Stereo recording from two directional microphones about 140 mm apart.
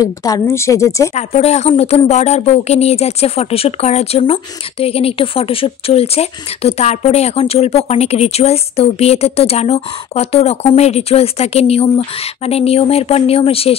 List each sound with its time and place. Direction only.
0.0 s a woman's voice: 25° left (ahead or behind)
1.1 s speech: 50° left (ahead or behind)